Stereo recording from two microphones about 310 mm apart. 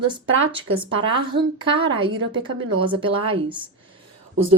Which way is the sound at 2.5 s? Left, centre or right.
Right.